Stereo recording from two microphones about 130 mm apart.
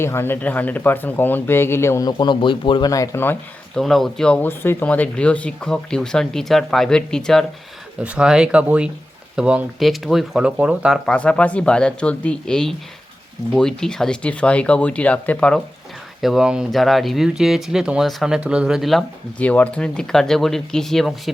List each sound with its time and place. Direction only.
0.0 s speech: 20° left (ahead or behind); by 2.9 s 40° left (ahead or behind)
2.9 s speech: 25° left (ahead or behind)
3.8 s speech: centre (ahead or behind)
8.0 s speech: 5° right (ahead or behind)
11.0 s speech: 10° left (ahead or behind)
16.2 s speech: 5° right (ahead or behind)